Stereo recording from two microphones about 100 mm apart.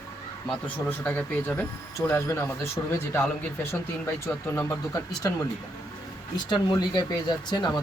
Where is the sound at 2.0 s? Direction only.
30° left (ahead or behind).